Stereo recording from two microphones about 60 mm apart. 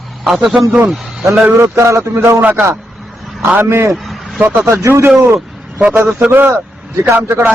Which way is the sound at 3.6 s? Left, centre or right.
Right.